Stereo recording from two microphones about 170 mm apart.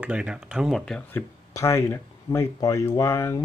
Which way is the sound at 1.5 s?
15° left (ahead or behind).